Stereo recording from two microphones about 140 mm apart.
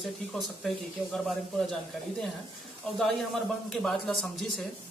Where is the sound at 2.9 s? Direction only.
Centre (ahead or behind).